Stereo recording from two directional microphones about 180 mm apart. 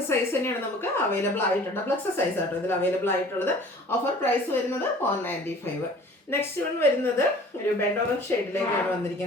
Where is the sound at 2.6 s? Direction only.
10° left (ahead or behind).